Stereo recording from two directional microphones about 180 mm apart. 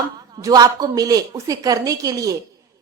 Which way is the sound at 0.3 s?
20° right (ahead or behind).